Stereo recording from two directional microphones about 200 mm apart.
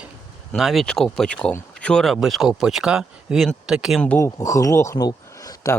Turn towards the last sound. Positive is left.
turn(degrees=15)  # may be behind; listen again after turning